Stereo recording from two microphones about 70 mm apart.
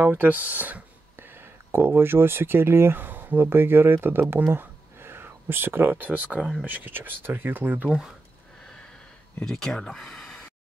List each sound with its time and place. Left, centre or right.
0.0 s speech: right
9.4 s speech: centre